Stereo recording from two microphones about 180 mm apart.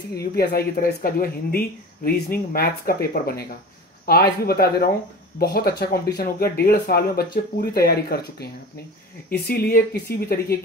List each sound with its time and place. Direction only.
0.1 s speech: 60° left (ahead or behind)